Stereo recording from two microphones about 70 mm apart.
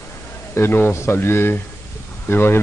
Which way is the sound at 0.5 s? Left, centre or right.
Left.